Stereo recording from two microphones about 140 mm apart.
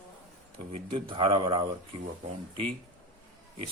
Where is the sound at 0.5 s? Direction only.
40° right (ahead or behind).